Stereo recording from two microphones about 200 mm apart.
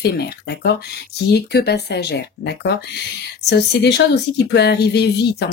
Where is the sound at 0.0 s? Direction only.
50° left (ahead or behind).